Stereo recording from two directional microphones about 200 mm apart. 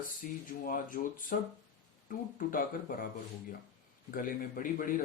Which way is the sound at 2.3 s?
45° left (ahead or behind).